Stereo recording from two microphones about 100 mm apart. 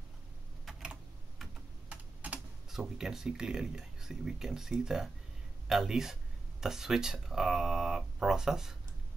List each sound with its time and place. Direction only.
0.7 s typing: centre (ahead or behind)
1.9 s speech: 15° right (ahead or behind)